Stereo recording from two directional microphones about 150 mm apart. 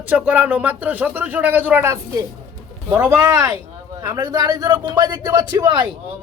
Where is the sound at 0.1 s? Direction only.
10° right (ahead or behind).